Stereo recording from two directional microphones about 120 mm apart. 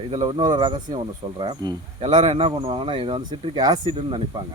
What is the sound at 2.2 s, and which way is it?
Speech, 55° right (ahead or behind).